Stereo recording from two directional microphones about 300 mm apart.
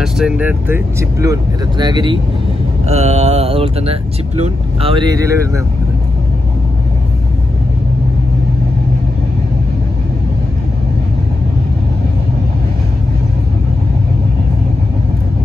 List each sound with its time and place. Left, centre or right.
0.0 s speech: centre